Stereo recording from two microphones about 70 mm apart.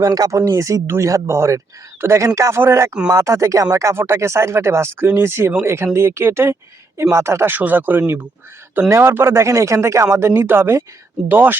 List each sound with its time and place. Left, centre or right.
0.0 s speech: right